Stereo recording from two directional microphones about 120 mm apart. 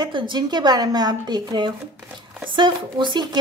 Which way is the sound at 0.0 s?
40° right (ahead or behind).